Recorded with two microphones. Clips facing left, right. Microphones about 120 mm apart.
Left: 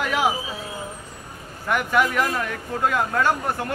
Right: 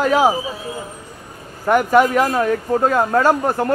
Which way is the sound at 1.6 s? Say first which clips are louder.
Right 8 dB; 40° right (ahead or behind).